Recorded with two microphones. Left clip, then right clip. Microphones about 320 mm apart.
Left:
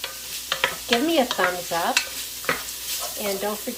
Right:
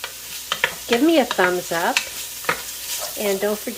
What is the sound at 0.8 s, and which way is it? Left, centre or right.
Stir, centre.